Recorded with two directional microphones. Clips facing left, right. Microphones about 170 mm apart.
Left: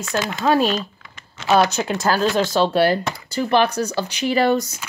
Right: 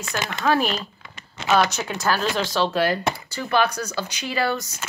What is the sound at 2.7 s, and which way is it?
Speech, 35° left (ahead or behind).